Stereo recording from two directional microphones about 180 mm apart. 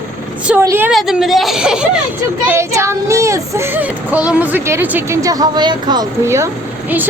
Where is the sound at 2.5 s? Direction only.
15° right (ahead or behind).